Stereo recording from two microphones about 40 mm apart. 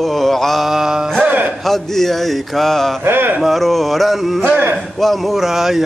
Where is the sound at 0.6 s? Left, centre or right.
Centre.